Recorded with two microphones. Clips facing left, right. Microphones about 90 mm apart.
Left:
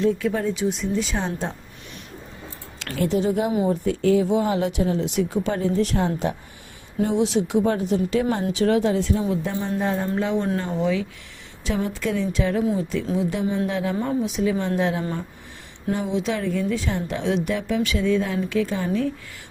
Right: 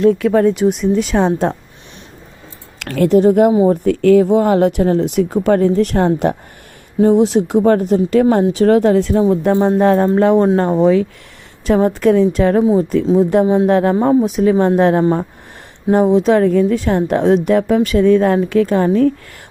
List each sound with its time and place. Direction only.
0.0 s speech: 65° right (ahead or behind)
2.7 s speech: 65° right (ahead or behind)
7.0 s a woman's voice: 45° right (ahead or behind); by 10.1 s 65° right (ahead or behind)
10.2 s a woman's voice: 50° right (ahead or behind)